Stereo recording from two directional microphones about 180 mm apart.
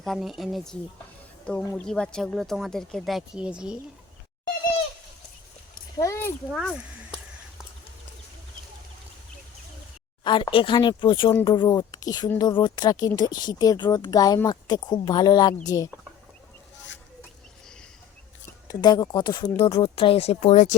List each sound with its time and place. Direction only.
0.0 s speech: centre (ahead or behind)
6.0 s speech: 15° left (ahead or behind)
10.2 s speech: 25° left (ahead or behind)
18.7 s speech: 20° left (ahead or behind); by 20.7 s 40° left (ahead or behind)